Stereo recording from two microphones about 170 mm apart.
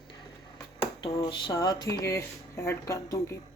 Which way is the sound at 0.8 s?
20° left (ahead or behind).